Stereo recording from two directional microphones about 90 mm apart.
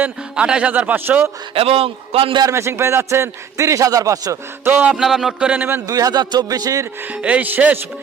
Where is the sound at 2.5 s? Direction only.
30° right (ahead or behind).